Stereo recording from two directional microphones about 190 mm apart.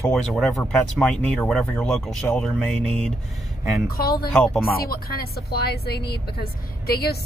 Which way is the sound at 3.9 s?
50° left (ahead or behind).